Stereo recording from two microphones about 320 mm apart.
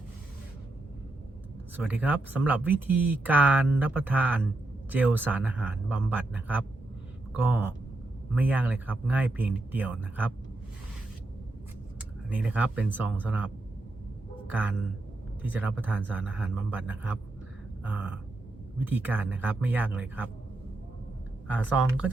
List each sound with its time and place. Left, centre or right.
1.7 s speech: centre
12.3 s speech: centre
15.4 s speech: centre
21.4 s speech: centre